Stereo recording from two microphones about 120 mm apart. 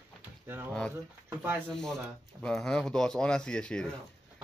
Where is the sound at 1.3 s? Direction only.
15° right (ahead or behind).